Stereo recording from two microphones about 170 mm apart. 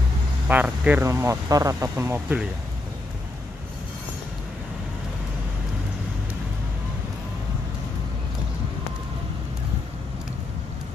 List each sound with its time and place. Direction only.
0.5 s speech: 10° right (ahead or behind)